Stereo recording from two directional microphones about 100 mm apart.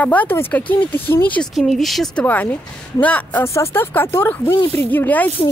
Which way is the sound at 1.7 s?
Centre (ahead or behind).